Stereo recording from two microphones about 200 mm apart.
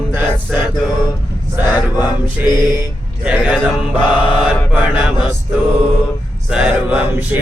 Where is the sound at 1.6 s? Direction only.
20° left (ahead or behind).